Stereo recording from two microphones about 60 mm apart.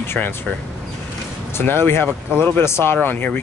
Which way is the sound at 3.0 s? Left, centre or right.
Left.